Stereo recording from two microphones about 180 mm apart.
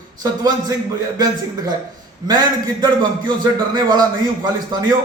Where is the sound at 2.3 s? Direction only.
25° right (ahead or behind).